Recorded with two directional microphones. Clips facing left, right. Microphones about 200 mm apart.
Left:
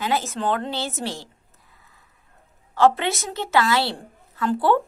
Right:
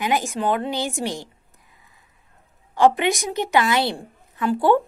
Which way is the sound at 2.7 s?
15° right (ahead or behind).